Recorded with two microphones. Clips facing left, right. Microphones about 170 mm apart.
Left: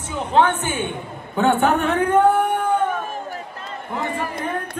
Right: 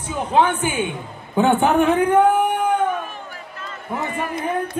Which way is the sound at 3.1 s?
45° left (ahead or behind).